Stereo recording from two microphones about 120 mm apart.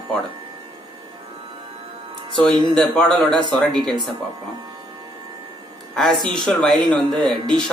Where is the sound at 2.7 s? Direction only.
5° left (ahead or behind).